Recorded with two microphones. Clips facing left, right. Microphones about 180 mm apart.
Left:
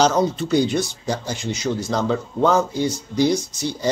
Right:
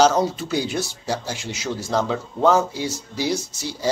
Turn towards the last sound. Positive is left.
turn(degrees=-5)  # may be behind; listen again after turning